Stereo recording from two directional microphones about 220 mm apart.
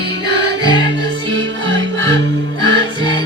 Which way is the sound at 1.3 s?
55° right (ahead or behind).